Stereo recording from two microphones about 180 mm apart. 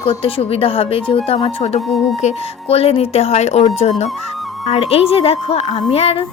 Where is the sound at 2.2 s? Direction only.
35° left (ahead or behind).